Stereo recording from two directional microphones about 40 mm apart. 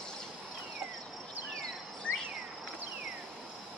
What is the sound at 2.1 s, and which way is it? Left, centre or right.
Cricket, left.